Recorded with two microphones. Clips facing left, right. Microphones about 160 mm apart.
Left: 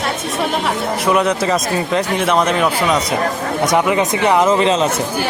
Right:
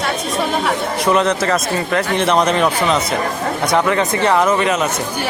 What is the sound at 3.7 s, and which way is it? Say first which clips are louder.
Speech: even; 15° left (ahead or behind).